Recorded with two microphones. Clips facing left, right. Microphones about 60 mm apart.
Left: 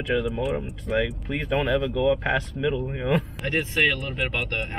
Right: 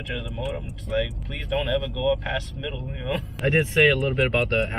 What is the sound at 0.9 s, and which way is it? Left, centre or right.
Speech, left.